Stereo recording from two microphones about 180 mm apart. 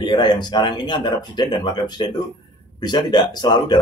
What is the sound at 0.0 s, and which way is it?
Speech, 25° left (ahead or behind).